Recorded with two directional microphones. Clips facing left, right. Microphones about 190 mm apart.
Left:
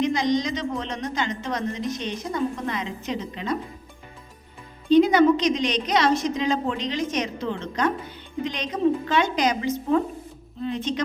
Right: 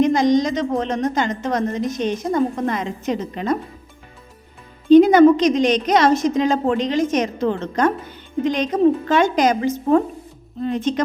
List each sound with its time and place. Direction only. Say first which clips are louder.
0.0 s a woman's voice: right 7 dB; 50° right (ahead or behind)
4.9 s a woman's voice: right 7 dB; 50° right (ahead or behind)